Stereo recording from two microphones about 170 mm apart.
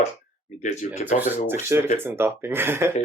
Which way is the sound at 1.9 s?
15° right (ahead or behind).